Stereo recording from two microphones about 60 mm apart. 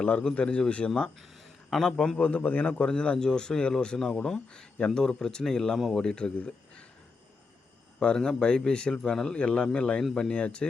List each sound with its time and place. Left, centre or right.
0.0 s a man's voice: centre
1.7 s a man's voice: centre
2.2 s a man's voice: left
7.9 s a man's voice: centre